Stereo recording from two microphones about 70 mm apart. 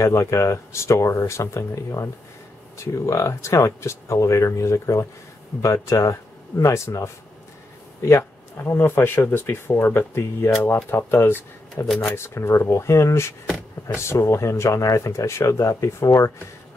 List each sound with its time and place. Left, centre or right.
0.0 s speech: left
8.5 s speech: left
12.2 s speech: left